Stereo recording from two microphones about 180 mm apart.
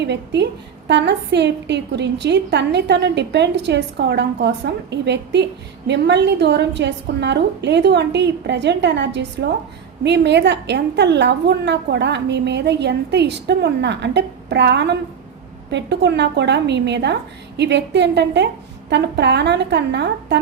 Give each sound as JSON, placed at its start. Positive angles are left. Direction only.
{"t": 0.0, "sound": "a woman's voice", "side_deg": -70}